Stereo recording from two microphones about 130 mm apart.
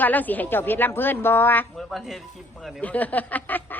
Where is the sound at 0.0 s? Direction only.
15° left (ahead or behind).